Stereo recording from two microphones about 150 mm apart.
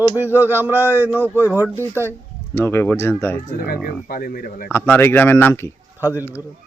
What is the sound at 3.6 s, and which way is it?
Speech, 70° left (ahead or behind).